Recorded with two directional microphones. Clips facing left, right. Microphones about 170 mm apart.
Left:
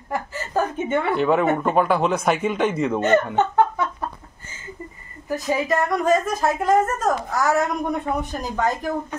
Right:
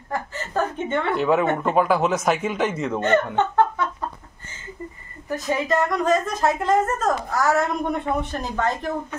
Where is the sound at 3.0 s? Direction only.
15° left (ahead or behind).